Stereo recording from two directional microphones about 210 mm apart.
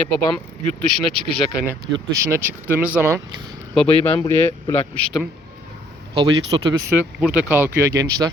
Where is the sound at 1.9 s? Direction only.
15° right (ahead or behind).